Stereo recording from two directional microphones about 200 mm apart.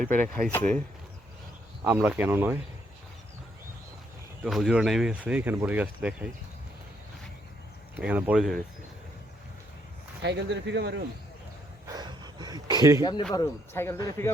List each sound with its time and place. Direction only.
0.1 s speech: 5° left (ahead or behind)
1.8 s speech: 10° right (ahead or behind)
4.4 s speech: centre (ahead or behind)
8.0 s speech: 5° right (ahead or behind)
10.2 s speech: 60° right (ahead or behind)
11.9 s a sound: 20° right (ahead or behind)
13.0 s speech: 20° left (ahead or behind)